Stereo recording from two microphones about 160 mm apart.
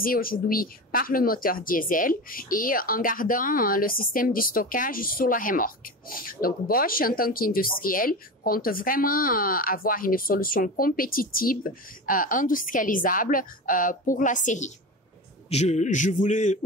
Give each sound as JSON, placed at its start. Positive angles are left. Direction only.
{"t": 0.0, "sound": "a man's voice", "side_deg": 65}